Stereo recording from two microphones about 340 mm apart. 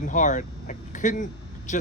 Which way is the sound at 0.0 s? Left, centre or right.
Left.